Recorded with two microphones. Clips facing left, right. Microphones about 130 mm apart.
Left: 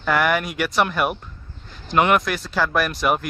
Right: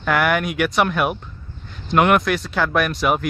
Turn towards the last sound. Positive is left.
turn(degrees=0)  # may be behind; listen again after turning